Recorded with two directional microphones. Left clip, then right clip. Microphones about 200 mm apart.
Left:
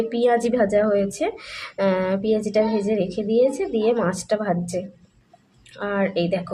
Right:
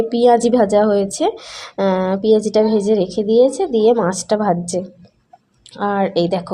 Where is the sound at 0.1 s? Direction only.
20° right (ahead or behind).